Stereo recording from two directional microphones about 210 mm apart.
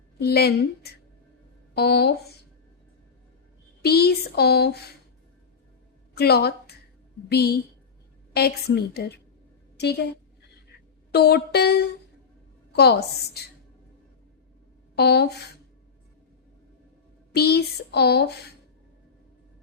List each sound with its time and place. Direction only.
0.2 s speech: 50° left (ahead or behind)
3.8 s speech: 50° left (ahead or behind)
6.1 s a woman's voice: 50° left (ahead or behind)
11.1 s speech: 50° left (ahead or behind)
14.9 s speech: 50° left (ahead or behind)
17.3 s speech: 50° left (ahead or behind)